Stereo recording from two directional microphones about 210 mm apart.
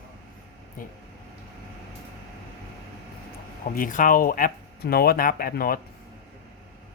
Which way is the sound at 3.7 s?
40° left (ahead or behind).